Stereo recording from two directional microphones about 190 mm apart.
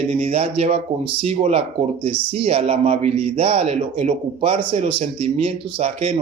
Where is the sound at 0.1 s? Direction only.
30° right (ahead or behind).